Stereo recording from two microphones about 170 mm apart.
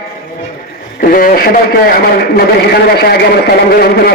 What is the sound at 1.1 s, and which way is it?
A man's voice, 55° left (ahead or behind).